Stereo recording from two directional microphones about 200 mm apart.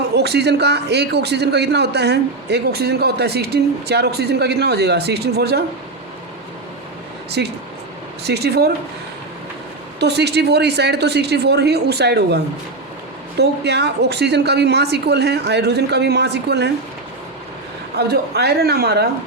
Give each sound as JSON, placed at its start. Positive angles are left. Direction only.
{"t": 0.2, "sound": "a man's voice", "side_deg": -55}
{"t": 7.3, "sound": "a man's voice", "side_deg": -55}
{"t": 10.0, "sound": "a man's voice", "side_deg": -55}
{"t": 13.4, "sound": "a man's voice", "side_deg": -55}
{"t": 17.9, "sound": "a man's voice", "side_deg": -55}